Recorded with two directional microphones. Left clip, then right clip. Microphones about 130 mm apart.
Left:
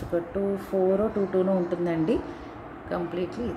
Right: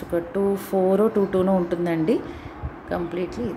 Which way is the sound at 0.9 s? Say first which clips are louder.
Right 5 dB; 55° right (ahead or behind).